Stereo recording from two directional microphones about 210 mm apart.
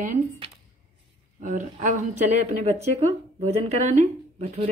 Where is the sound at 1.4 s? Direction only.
35° right (ahead or behind).